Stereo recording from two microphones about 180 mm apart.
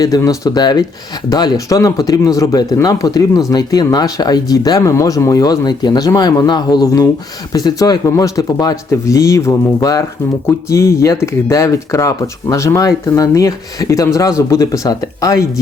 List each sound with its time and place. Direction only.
0.0 s speech: 20° left (ahead or behind)